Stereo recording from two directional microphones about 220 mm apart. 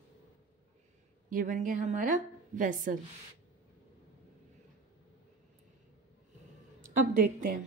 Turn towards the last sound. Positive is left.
turn(degrees=-35)  # may be behind; listen again after turning